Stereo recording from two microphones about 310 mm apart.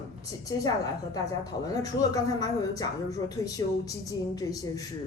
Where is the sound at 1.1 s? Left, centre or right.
Centre.